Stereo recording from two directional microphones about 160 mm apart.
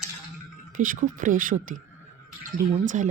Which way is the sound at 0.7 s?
55° right (ahead or behind).